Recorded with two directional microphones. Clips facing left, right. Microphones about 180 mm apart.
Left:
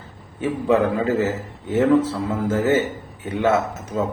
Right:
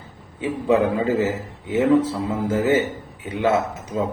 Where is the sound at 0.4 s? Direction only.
15° right (ahead or behind).